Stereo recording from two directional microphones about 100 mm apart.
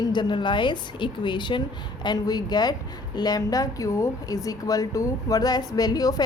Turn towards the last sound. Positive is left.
turn(degrees=40)  # may be behind; listen again after turning